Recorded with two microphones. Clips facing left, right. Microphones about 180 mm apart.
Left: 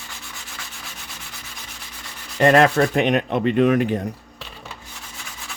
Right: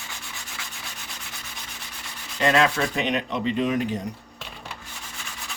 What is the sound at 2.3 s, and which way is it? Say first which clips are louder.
Rub: left 6 dB; 55° left (ahead or behind).